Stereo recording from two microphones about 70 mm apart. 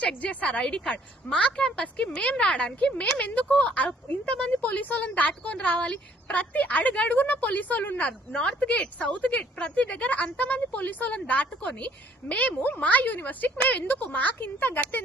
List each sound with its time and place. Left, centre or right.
0.0 s a woman's voice: centre